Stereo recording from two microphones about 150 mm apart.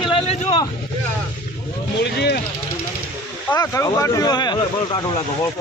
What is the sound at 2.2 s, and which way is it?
Speech, 90° left.